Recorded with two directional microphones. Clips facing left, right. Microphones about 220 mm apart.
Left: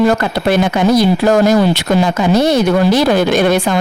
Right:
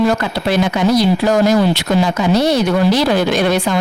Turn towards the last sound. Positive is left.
turn(degrees=50)  # may be behind; listen again after turning